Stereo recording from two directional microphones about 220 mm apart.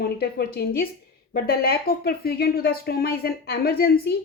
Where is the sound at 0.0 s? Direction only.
45° left (ahead or behind).